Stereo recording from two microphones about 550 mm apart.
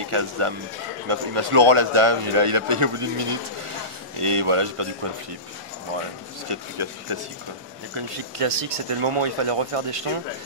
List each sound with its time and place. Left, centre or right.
0.0 s speech: right
6.5 s speech: right